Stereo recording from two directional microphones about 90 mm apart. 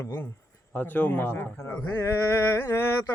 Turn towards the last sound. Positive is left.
turn(degrees=30)  # may be behind; listen again after turning